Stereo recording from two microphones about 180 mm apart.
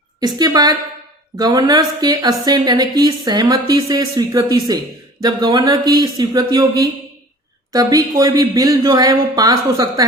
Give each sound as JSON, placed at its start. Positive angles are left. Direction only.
{"t": 0.2, "sound": "a woman's voice", "side_deg": -20}